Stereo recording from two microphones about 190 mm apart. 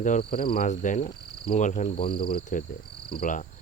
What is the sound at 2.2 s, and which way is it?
Cricket, 50° left (ahead or behind).